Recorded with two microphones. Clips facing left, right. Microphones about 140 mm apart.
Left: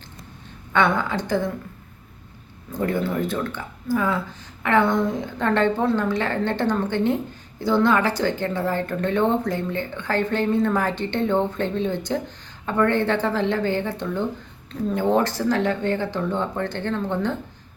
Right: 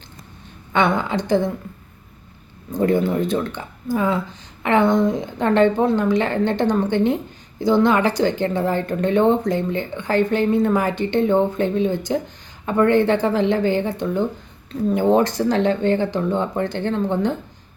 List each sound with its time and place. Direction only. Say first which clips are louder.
0.7 s speech: right 2 dB; 20° right (ahead or behind)
2.7 s speech: right 5 dB; 20° right (ahead or behind)